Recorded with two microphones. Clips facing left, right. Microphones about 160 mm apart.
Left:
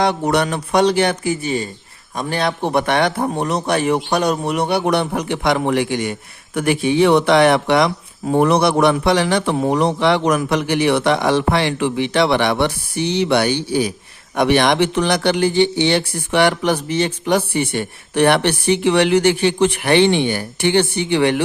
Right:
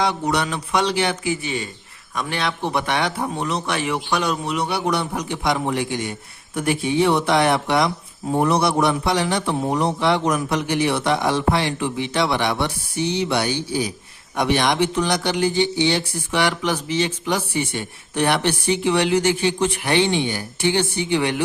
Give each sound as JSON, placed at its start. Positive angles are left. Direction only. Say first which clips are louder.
{"t": 0.0, "sound": "a man's voice", "louder": "left 4 dB", "side_deg": 55}